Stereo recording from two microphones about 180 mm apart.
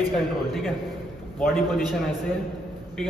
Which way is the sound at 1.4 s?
Centre (ahead or behind).